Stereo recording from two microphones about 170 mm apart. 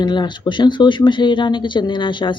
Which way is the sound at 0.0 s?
25° left (ahead or behind).